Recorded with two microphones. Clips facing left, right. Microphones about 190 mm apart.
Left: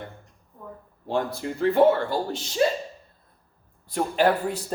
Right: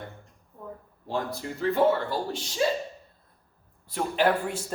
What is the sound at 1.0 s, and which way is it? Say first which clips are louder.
Speech: left 4 dB; 65° left (ahead or behind).